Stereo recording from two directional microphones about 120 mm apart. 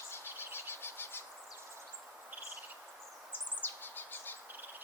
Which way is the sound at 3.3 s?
15° left (ahead or behind).